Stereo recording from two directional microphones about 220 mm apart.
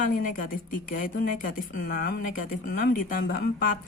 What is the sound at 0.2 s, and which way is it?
Speech, 40° left (ahead or behind).